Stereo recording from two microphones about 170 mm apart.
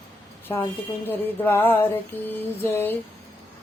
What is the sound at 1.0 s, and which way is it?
Mantra, 10° left (ahead or behind).